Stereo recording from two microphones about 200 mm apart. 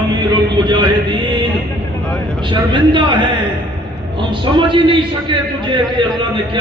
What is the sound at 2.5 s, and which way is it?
Speech, 25° right (ahead or behind).